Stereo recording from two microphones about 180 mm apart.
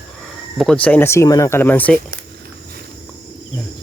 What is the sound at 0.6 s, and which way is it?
Speech, 5° left (ahead or behind).